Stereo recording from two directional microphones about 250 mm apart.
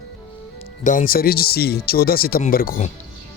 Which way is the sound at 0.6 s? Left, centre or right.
Left.